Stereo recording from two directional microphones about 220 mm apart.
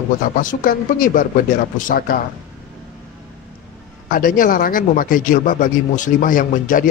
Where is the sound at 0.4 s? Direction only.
40° left (ahead or behind).